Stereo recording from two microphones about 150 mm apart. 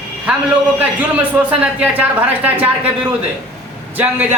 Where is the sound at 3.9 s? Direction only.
10° right (ahead or behind).